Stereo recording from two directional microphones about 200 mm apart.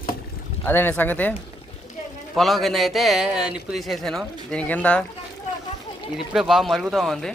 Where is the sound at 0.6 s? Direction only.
10° left (ahead or behind).